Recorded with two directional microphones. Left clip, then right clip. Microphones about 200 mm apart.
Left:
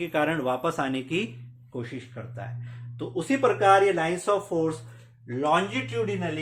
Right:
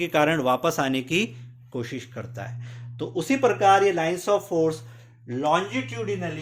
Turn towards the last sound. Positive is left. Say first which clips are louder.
# even
turn(degrees=-15)  # may be behind; listen again after turning